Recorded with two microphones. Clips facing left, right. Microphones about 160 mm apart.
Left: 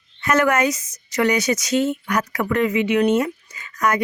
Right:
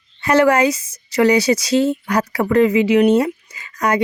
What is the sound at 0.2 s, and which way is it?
Speech, 30° right (ahead or behind).